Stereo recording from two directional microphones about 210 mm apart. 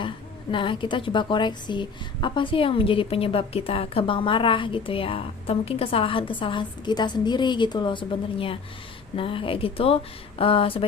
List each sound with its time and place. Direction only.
0.5 s a woman's voice: 25° left (ahead or behind)